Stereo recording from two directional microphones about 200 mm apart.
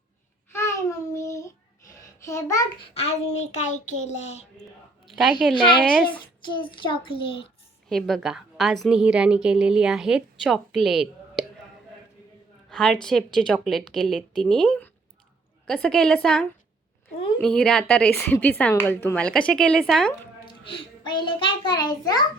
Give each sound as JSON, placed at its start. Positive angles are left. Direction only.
{"t": 0.5, "sound": "a sound", "side_deg": 15}
{"t": 2.2, "sound": "a child's voice", "side_deg": 15}
{"t": 2.9, "sound": "speech", "side_deg": 30}
{"t": 5.0, "sound": "a woman's voice", "side_deg": 0}
{"t": 5.5, "sound": "a child's voice", "side_deg": 25}
{"t": 7.9, "sound": "a woman's voice", "side_deg": 0}
{"t": 12.7, "sound": "a woman's voice", "side_deg": 0}
{"t": 17.1, "sound": "a sound", "side_deg": 30}
{"t": 17.4, "sound": "a woman's voice", "side_deg": 5}
{"t": 20.4, "sound": "a child's voice", "side_deg": 25}